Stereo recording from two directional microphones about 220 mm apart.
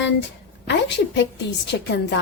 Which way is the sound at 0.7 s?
55° left (ahead or behind).